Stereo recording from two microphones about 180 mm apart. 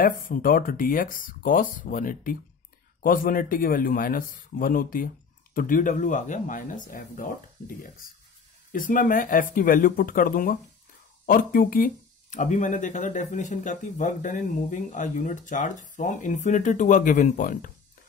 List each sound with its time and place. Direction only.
0.0 s speech: 50° left (ahead or behind)